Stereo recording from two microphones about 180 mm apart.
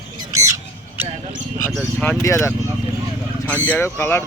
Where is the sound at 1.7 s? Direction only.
10° left (ahead or behind).